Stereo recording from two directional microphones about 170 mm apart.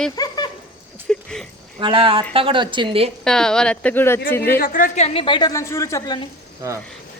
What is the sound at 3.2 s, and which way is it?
Speech, 5° left (ahead or behind).